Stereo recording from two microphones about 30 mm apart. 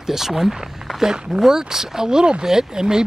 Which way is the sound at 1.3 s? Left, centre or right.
Right.